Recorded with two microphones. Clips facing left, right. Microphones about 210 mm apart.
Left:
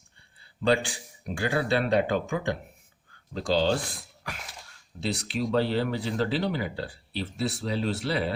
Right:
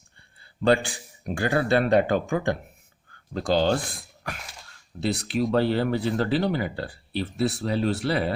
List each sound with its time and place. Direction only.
0.6 s speech: 50° right (ahead or behind)
4.9 s speech: 55° right (ahead or behind)